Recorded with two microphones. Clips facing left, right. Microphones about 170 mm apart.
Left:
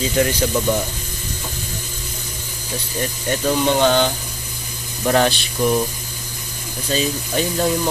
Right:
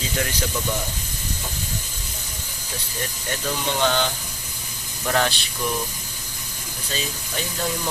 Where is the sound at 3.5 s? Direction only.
40° left (ahead or behind).